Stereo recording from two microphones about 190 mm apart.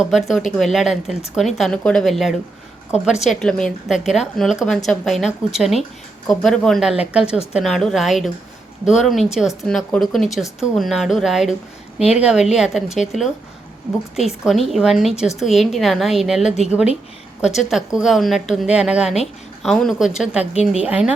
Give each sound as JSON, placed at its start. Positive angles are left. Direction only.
{"t": 0.0, "sound": "a woman's voice", "side_deg": 0}
{"t": 14.2, "sound": "a woman's voice", "side_deg": 0}